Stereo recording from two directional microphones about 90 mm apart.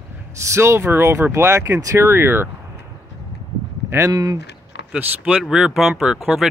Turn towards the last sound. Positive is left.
turn(degrees=-5)  # may be behind; listen again after turning